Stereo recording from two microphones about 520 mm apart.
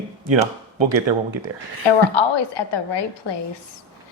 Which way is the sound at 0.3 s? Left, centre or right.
Right.